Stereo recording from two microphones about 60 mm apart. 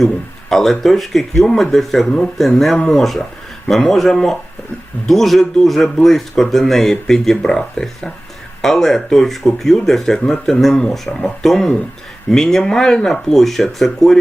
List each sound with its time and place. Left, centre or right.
0.5 s speech: centre
2.0 s speech: centre
2.4 s speech: centre